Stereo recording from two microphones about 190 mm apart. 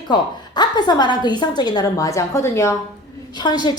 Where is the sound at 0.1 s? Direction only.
20° left (ahead or behind).